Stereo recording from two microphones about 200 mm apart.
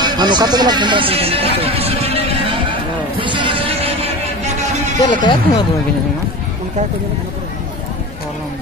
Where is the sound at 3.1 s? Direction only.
25° right (ahead or behind).